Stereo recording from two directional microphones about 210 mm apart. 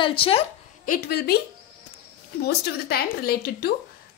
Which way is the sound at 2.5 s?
50° left (ahead or behind).